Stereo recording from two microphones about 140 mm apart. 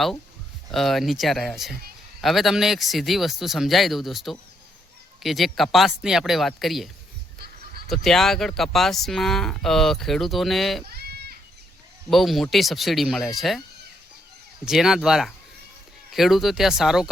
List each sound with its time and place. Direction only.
0.7 s speech: centre (ahead or behind)
10.8 s goat: 90° right
12.1 s speech: centre (ahead or behind)
14.6 s speech: 5° right (ahead or behind)